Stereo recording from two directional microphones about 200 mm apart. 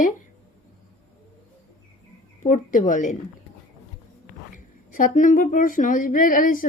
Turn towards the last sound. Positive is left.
turn(degrees=45)  # may be behind; listen again after turning